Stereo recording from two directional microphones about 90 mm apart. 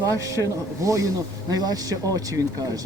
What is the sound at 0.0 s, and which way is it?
Speech, 35° right (ahead or behind).